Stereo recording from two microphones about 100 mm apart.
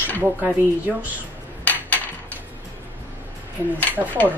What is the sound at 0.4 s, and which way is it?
Speech, 15° right (ahead or behind).